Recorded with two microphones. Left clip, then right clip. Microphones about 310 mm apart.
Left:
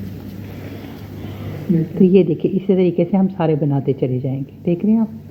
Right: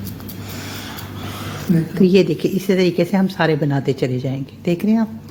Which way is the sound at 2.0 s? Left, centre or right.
Right.